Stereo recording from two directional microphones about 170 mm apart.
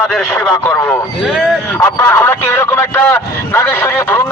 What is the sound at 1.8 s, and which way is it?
Speech, 15° left (ahead or behind).